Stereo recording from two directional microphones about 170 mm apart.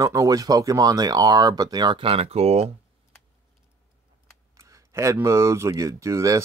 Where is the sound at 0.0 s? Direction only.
20° right (ahead or behind); by 2.7 s 35° right (ahead or behind).